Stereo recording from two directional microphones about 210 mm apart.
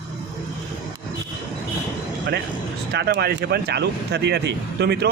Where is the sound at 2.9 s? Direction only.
50° right (ahead or behind).